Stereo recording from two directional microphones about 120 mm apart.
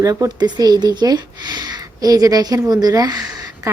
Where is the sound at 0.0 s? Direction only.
30° right (ahead or behind).